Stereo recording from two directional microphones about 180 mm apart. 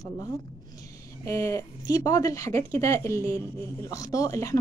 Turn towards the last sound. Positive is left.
turn(degrees=20)  # may be behind; listen again after turning